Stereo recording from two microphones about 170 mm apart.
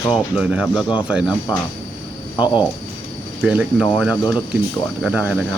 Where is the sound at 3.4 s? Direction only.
5° right (ahead or behind).